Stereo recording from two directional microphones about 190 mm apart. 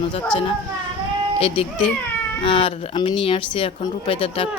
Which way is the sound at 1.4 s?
30° left (ahead or behind).